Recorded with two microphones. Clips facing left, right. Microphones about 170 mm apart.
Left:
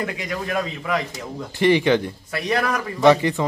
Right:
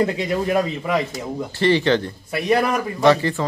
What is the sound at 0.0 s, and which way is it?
A man's voice, 25° right (ahead or behind).